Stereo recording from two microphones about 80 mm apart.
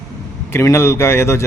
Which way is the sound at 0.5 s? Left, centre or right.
Left.